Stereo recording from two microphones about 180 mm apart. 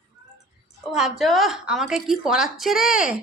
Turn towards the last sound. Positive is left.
turn(degrees=-5)  # may be behind; listen again after turning